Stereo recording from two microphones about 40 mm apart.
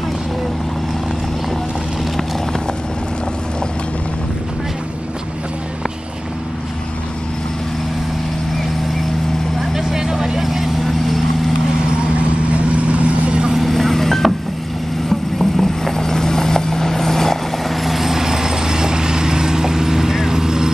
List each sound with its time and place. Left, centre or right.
9.6 s vehicle: centre
12.4 s vehicle: right
13.5 s vehicle: centre
17.8 s vehicle: centre